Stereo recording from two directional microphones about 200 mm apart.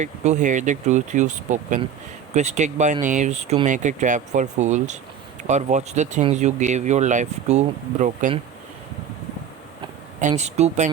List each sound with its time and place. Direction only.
0.0 s speech: 35° right (ahead or behind)
10.2 s speech: 35° right (ahead or behind)